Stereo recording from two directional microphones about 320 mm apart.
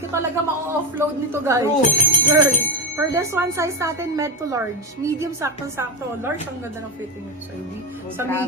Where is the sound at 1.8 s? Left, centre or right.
Left.